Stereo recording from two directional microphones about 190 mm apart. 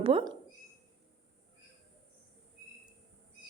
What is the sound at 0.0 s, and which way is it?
Speech, 30° right (ahead or behind).